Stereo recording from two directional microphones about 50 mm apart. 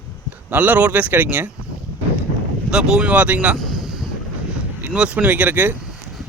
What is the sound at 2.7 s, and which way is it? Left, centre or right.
Speech, centre.